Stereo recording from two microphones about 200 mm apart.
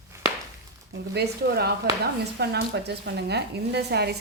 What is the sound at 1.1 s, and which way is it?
A woman's voice, 55° right (ahead or behind).